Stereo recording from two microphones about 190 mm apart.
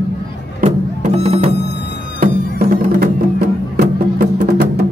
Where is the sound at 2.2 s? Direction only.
50° right (ahead or behind).